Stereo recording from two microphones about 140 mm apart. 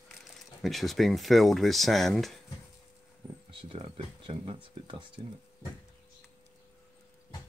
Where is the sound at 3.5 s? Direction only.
40° right (ahead or behind).